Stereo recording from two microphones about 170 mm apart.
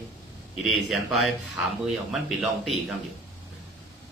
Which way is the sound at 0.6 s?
Centre (ahead or behind).